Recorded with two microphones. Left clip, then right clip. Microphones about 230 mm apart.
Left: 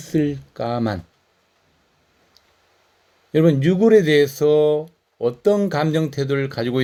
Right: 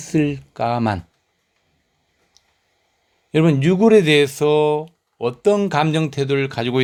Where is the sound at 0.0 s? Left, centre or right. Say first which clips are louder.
Right 1 dB; right.